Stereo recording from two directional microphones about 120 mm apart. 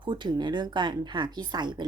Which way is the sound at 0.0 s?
40° right (ahead or behind).